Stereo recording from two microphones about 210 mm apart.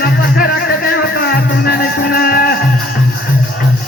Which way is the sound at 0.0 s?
50° left (ahead or behind).